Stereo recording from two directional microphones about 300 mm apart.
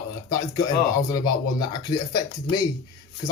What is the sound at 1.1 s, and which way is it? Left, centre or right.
A man's voice, centre.